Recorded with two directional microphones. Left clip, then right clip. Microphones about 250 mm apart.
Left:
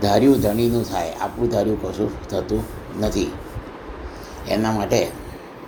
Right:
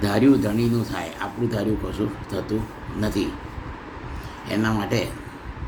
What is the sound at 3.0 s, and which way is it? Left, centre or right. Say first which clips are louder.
Speech: left 3 dB; centre.